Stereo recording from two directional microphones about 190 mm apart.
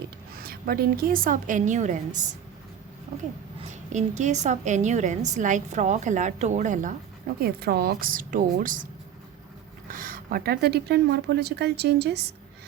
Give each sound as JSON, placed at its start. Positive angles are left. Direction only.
{"t": 0.3, "sound": "a woman's voice", "side_deg": -50}
{"t": 3.7, "sound": "a woman's voice", "side_deg": -40}
{"t": 7.3, "sound": "a woman's voice", "side_deg": -55}
{"t": 9.9, "sound": "speech", "side_deg": -45}